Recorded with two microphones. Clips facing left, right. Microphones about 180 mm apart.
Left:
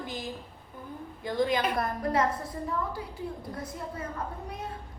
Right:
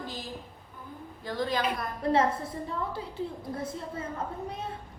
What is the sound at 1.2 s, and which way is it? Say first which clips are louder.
Speech: left 4 dB; 20° left (ahead or behind).